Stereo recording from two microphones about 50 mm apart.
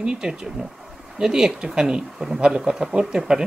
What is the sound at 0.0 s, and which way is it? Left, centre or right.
Speech, centre.